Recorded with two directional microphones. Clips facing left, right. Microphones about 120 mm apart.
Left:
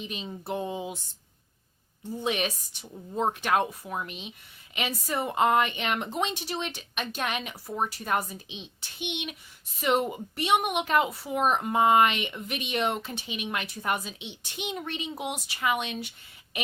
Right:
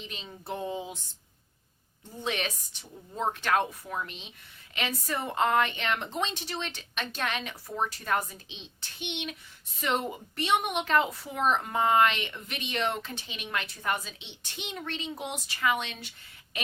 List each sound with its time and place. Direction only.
0.0 s a woman's voice: 15° left (ahead or behind)
2.2 s a woman's voice: 15° left (ahead or behind)
10.3 s a woman's voice: 15° left (ahead or behind)